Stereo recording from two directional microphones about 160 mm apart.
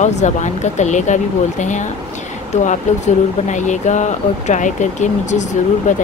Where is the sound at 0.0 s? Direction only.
45° left (ahead or behind).